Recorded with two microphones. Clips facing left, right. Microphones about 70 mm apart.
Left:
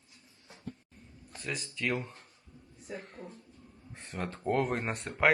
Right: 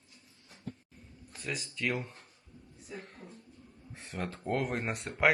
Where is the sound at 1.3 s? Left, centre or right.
Centre.